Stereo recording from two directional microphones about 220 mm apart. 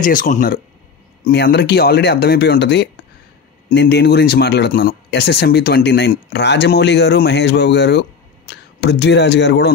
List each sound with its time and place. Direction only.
0.0 s speech: 35° left (ahead or behind)
1.2 s speech: 50° left (ahead or behind)